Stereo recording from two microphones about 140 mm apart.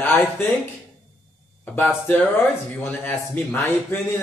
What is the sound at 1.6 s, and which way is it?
A man's voice, 10° left (ahead or behind).